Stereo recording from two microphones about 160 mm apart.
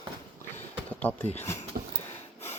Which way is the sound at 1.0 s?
10° left (ahead or behind).